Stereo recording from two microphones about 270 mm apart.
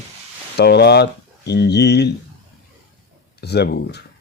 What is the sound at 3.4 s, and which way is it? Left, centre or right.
Speech, left.